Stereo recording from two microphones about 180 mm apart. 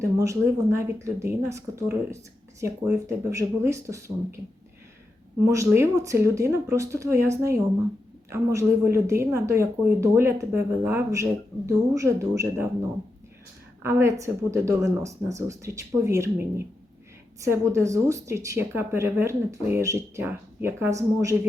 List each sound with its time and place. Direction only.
0.0 s a woman's voice: 15° right (ahead or behind)
5.7 s a woman's voice: 15° right (ahead or behind)
13.8 s a woman's voice: 15° right (ahead or behind)